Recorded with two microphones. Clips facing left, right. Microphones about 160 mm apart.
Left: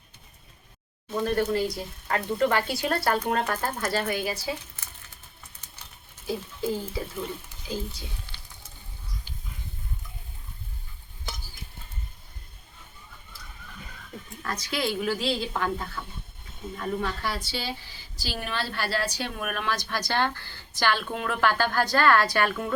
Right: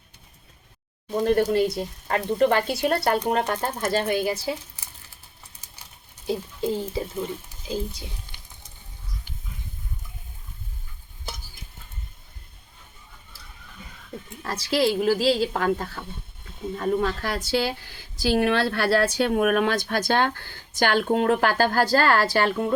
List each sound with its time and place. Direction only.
1.1 s a woman's voice: 35° right (ahead or behind)
6.2 s speech: 25° right (ahead or behind)
14.4 s a woman's voice: 30° right (ahead or behind)